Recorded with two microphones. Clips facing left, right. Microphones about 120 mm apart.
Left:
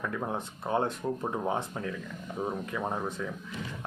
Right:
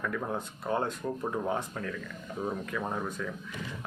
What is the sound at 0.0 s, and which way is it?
Speech, 20° left (ahead or behind).